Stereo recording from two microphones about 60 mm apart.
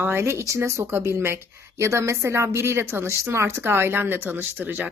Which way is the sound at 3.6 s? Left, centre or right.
Right.